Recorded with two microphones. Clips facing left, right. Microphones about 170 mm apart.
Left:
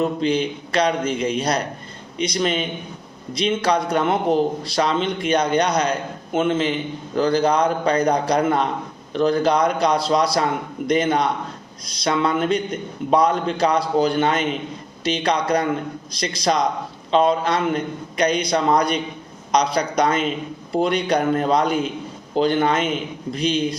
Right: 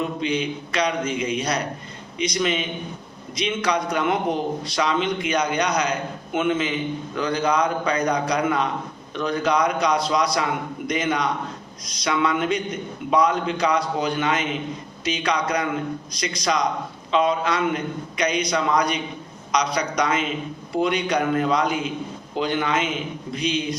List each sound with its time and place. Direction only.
0.0 s a man's voice: 35° left (ahead or behind)